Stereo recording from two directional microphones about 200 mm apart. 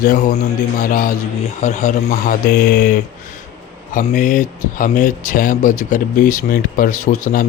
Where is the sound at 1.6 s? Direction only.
35° left (ahead or behind).